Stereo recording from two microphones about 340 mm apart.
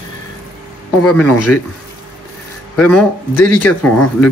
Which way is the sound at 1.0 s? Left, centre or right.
Left.